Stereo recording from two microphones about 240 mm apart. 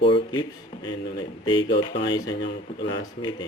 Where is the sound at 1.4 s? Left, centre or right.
Centre.